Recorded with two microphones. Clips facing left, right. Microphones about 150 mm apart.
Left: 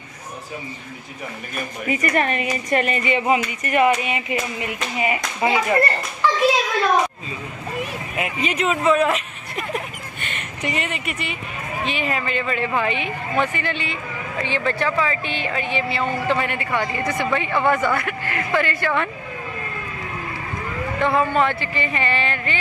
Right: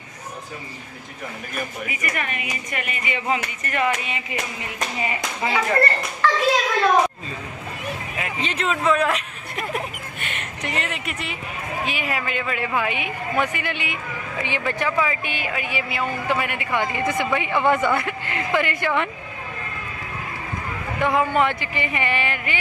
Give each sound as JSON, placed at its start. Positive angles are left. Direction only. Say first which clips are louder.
{"t": 1.9, "sound": "a woman's voice", "louder": "left 8 dB", "side_deg": 35}
{"t": 3.3, "sound": "speech", "louder": "left 5 dB", "side_deg": 20}
{"t": 8.2, "sound": "speech", "louder": "left 5 dB", "side_deg": 10}
{"t": 21.0, "sound": "speech", "louder": "left 1 dB", "side_deg": -15}